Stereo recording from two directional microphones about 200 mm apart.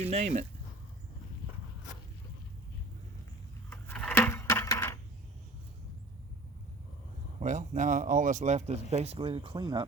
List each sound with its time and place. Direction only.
0.1 s speech: 35° right (ahead or behind)
3.7 s a sound: 5° left (ahead or behind)
7.3 s speech: 35° right (ahead or behind)